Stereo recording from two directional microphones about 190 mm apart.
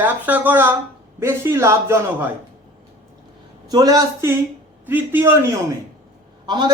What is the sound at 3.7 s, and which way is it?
A woman's voice, 20° right (ahead or behind).